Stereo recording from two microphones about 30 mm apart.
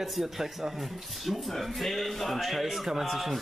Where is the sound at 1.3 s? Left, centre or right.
Centre.